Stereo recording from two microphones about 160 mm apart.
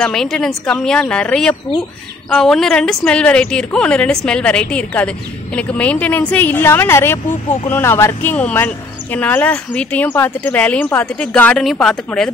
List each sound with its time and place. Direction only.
0.0 s speech: 5° left (ahead or behind)